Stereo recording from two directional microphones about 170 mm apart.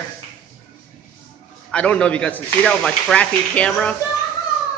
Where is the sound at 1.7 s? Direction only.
5° left (ahead or behind).